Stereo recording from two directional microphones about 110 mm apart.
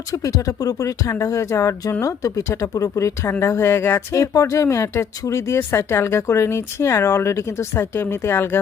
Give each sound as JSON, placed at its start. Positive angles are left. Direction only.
{"t": 0.1, "sound": "speech", "side_deg": 30}